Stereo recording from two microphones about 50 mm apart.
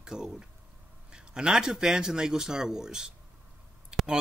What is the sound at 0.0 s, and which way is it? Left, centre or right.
Speech, centre.